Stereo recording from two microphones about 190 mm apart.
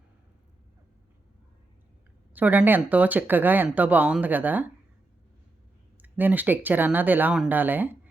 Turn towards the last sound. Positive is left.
turn(degrees=-10)  # may be behind; listen again after turning